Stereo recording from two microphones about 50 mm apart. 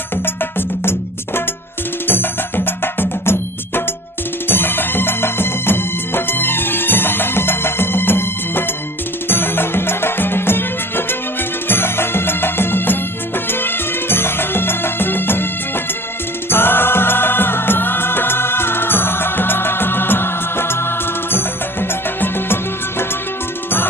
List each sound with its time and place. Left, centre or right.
2.0 s music: left
4.4 s music: left